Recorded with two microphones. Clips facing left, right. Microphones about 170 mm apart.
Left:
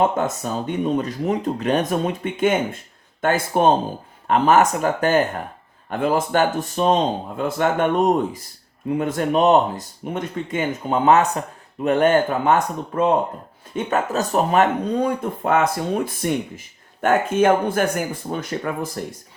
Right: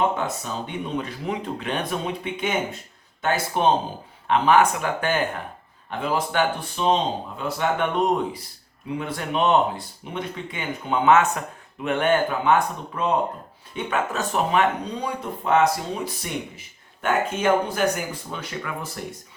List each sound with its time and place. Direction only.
0.2 s speech: 45° left (ahead or behind)